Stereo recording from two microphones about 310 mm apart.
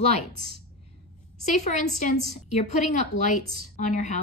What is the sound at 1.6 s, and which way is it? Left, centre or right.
A woman's voice, left.